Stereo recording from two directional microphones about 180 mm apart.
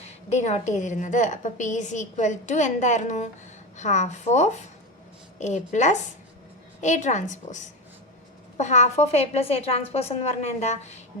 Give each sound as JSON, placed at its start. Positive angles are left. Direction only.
{"t": 0.3, "sound": "a woman's voice", "side_deg": 40}